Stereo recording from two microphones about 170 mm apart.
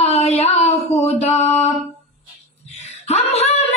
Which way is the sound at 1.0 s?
40° left (ahead or behind).